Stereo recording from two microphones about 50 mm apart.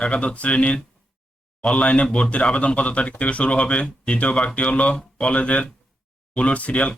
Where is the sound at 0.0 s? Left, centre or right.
Left.